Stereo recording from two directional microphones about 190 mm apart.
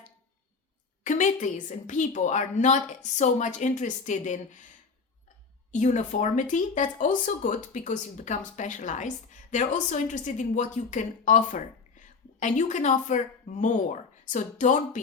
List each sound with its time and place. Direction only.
1.0 s a woman's voice: 40° left (ahead or behind)
5.7 s a woman's voice: 40° left (ahead or behind)